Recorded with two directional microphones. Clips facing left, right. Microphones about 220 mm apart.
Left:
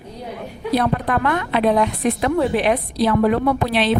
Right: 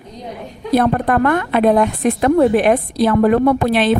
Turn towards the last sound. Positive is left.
turn(degrees=-50)  # may be behind; listen again after turning